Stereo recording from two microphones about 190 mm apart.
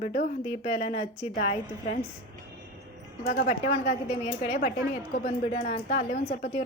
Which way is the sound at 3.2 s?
45° left (ahead or behind).